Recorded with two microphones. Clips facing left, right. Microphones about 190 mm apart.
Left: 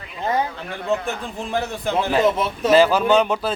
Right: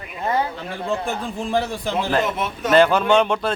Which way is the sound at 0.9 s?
35° right (ahead or behind).